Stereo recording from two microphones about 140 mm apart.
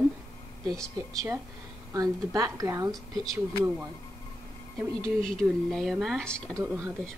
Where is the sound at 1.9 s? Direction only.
25° right (ahead or behind).